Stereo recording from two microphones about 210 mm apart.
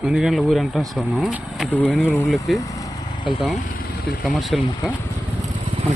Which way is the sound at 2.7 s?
20° left (ahead or behind).